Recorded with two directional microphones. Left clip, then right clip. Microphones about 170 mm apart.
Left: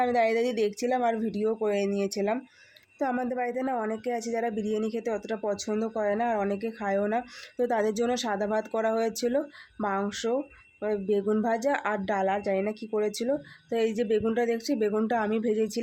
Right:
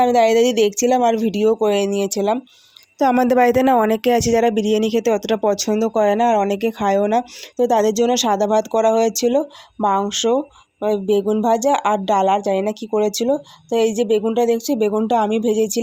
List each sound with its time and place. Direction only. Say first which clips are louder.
0.0 s speech: right 11 dB; 40° right (ahead or behind)
3.0 s speech: right 15 dB; 50° right (ahead or behind); by 15.8 s 35° right (ahead or behind)